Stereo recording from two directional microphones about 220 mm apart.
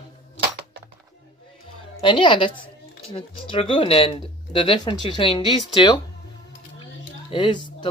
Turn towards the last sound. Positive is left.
turn(degrees=20)  # may be behind; listen again after turning